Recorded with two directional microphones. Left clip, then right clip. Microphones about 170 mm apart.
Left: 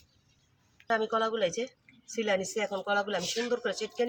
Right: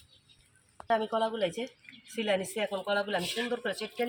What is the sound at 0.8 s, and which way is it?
Speech, 5° left (ahead or behind).